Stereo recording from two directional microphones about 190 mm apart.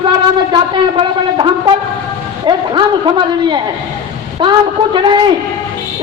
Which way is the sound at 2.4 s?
25° right (ahead or behind).